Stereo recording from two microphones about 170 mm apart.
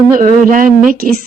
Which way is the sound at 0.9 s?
60° right (ahead or behind).